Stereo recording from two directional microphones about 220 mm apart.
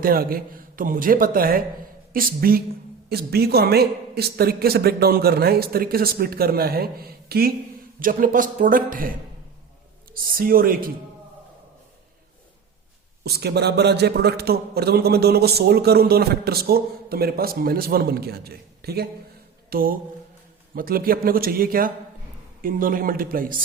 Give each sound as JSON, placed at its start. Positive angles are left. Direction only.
{"t": 0.0, "sound": "a man's voice", "side_deg": -40}
{"t": 13.2, "sound": "a man's voice", "side_deg": -50}